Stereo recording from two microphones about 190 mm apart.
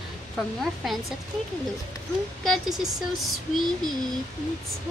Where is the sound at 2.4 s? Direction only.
Centre (ahead or behind).